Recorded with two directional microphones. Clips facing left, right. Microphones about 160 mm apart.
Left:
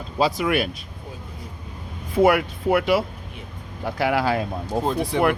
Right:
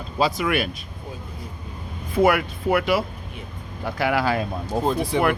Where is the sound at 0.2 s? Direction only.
30° left (ahead or behind).